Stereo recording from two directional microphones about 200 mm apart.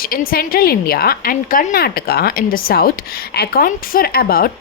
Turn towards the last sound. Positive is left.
turn(degrees=50)  # may be behind; listen again after turning